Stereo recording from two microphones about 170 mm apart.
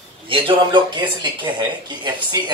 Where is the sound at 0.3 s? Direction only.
30° right (ahead or behind).